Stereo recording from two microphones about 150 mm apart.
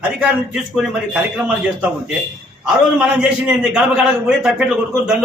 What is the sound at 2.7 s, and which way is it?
A man's voice, 5° right (ahead or behind).